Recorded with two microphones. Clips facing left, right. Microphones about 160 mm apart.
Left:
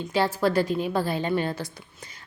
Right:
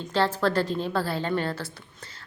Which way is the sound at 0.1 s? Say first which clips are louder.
Left 1 dB; 10° left (ahead or behind).